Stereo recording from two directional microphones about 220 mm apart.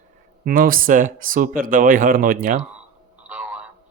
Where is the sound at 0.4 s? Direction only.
40° right (ahead or behind).